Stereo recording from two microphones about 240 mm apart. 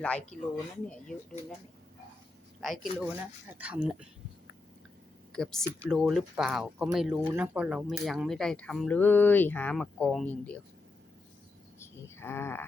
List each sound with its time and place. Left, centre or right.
0.5 s speech: centre
2.6 s speech: centre
5.3 s speech: centre
11.8 s a sound: centre